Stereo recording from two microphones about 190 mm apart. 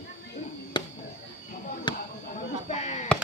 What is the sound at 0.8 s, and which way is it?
Chop, 25° left (ahead or behind).